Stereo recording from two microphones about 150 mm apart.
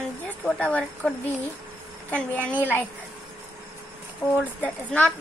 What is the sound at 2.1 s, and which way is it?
Speech, 10° left (ahead or behind).